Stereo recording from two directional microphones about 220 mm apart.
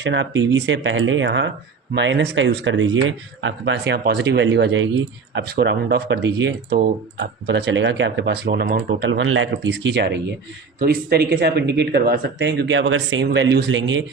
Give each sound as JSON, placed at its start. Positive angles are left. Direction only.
{"t": 0.0, "sound": "speech", "side_deg": -55}